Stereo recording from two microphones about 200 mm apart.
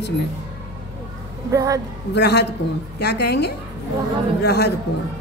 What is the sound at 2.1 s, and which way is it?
A woman's voice, 55° left (ahead or behind).